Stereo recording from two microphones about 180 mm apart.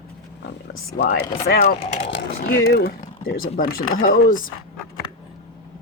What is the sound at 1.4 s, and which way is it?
Speech, 60° left (ahead or behind).